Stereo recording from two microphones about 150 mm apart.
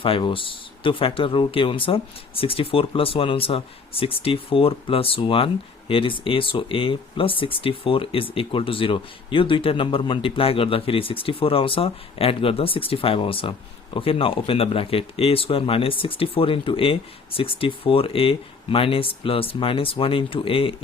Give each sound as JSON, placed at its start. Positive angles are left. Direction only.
{"t": 0.0, "sound": "speech", "side_deg": 35}